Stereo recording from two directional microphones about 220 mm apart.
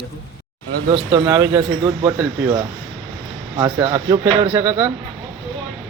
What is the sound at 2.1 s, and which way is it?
Speech, 10° right (ahead or behind).